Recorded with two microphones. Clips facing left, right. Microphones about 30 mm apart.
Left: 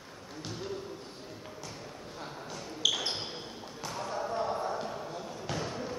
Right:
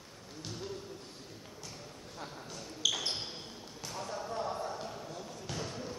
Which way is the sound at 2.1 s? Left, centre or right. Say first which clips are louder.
Left 2 dB; centre.